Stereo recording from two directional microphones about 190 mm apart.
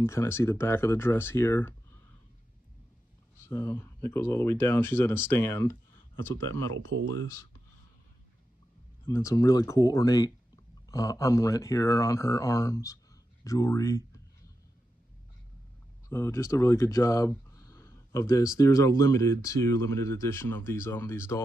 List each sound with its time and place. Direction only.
0.0 s speech: 15° left (ahead or behind)
3.4 s speech: 10° left (ahead or behind)
6.5 s speech: 90° right
9.0 s speech: 15° left (ahead or behind)
16.1 s speech: 15° left (ahead or behind)